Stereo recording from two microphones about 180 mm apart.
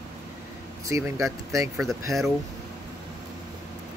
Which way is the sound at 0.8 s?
15° right (ahead or behind).